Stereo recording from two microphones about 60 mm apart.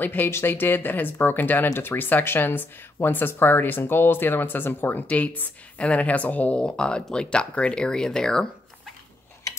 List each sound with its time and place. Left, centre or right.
0.0 s speech: left; by 8.5 s centre